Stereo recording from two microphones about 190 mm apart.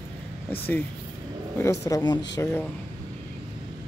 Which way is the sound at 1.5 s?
15° left (ahead or behind).